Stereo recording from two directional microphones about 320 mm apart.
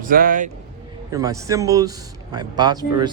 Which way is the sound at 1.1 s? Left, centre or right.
Centre.